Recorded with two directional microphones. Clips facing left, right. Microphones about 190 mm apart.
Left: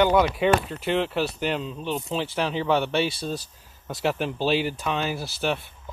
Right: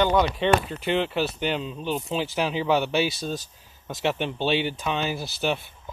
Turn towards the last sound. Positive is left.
turn(degrees=0)  # may be behind; listen again after turning